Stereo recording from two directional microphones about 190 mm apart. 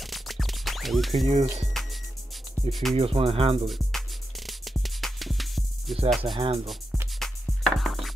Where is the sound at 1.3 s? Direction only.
35° right (ahead or behind).